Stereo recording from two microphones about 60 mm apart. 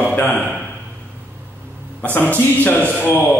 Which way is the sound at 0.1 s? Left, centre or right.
Left.